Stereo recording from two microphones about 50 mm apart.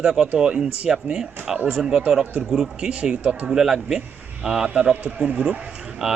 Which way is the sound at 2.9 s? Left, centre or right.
Right.